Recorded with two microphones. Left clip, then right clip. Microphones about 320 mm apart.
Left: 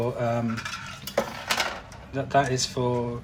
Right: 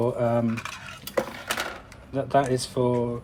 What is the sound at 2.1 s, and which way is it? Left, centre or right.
Speech, right.